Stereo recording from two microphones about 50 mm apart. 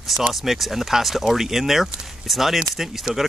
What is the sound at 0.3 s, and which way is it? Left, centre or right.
Speech, centre.